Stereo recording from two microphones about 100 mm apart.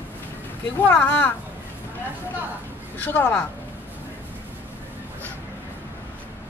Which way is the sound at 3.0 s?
20° left (ahead or behind).